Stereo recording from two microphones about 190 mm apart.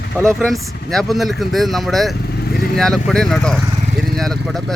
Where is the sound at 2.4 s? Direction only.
55° left (ahead or behind).